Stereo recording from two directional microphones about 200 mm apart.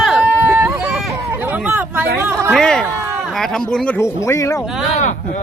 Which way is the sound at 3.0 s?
10° right (ahead or behind).